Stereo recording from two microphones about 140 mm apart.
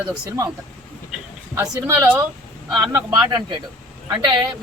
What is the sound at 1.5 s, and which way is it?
Speech, 20° right (ahead or behind).